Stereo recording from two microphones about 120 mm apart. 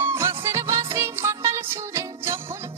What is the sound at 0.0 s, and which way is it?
Music, 20° right (ahead or behind).